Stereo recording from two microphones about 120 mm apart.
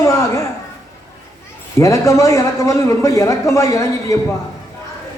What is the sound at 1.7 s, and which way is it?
A woman's voice, 25° left (ahead or behind).